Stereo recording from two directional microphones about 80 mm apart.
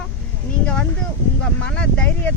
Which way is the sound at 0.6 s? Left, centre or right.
Centre.